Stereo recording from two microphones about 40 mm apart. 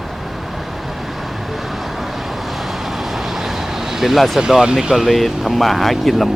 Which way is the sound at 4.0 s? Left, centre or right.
Centre.